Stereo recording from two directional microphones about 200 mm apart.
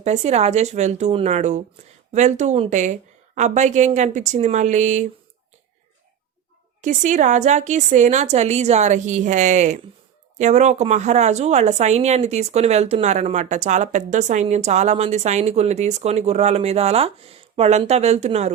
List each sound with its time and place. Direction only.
0.0 s a woman's voice: 35° right (ahead or behind)
6.8 s a woman's voice: 40° right (ahead or behind)